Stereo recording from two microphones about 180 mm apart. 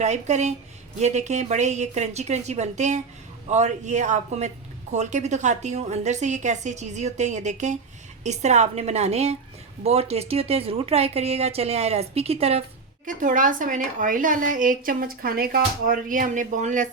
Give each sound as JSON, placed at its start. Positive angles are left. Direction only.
{"t": 0.0, "sound": "a man's voice", "side_deg": -40}
{"t": 13.1, "sound": "speech", "side_deg": -45}